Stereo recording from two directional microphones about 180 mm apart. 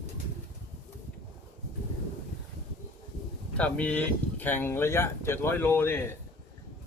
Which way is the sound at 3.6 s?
5° left (ahead or behind).